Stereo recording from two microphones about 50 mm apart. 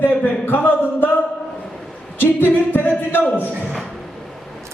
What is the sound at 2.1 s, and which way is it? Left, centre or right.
A capella, left.